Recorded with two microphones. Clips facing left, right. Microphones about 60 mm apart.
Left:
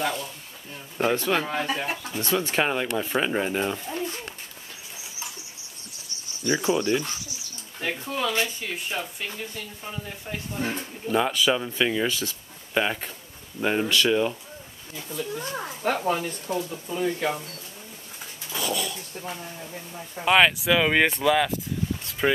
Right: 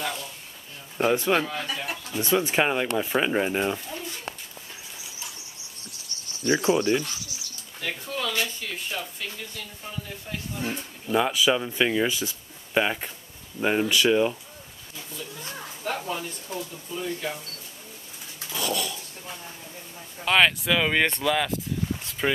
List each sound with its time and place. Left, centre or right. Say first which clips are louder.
0.9 s speech: right 1 dB; centre
1.4 s speech: left 3 dB; left
2.1 s speech: right 2 dB; centre
3.8 s a sound: left 5 dB; left
6.4 s speech: right 2 dB; centre
7.8 s speech: left 3 dB; centre
11.1 s speech: even; centre
15.1 s speech: left 8 dB; left
16.5 s speech: left 6 dB; left
16.9 s speech: left 5 dB; left
18.5 s dog: even; centre
20.2 s speech: left 2 dB; centre